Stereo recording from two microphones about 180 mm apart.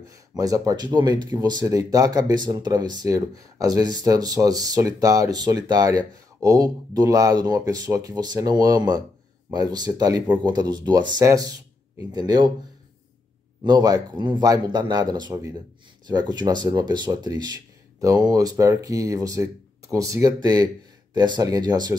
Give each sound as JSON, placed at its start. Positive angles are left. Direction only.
{"t": 0.4, "sound": "speech", "side_deg": -20}
{"t": 13.7, "sound": "speech", "side_deg": -20}